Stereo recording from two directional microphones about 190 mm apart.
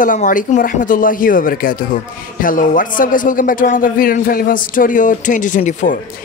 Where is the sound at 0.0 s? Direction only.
45° left (ahead or behind).